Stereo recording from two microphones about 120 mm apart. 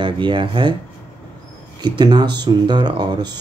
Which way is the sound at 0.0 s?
40° right (ahead or behind).